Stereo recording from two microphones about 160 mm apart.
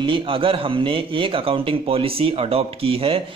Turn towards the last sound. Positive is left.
turn(degrees=-35)  # may be behind; listen again after turning